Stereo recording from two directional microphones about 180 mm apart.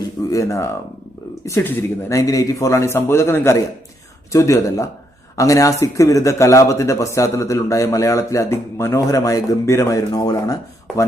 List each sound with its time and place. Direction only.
0.3 s a man's voice: 15° left (ahead or behind)